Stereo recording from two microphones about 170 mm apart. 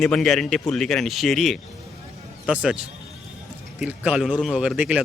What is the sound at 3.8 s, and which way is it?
Speech, 5° right (ahead or behind).